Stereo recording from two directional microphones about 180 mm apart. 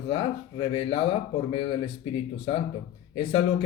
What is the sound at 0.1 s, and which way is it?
Speech, 30° left (ahead or behind).